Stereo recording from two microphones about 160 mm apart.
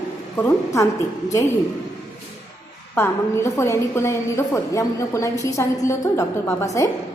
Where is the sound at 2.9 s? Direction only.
15° left (ahead or behind).